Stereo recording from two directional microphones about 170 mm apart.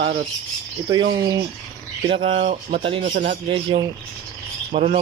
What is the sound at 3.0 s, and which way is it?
Speech, 50° right (ahead or behind).